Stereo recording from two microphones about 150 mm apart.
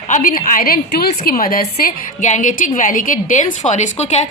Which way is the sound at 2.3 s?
60° left (ahead or behind).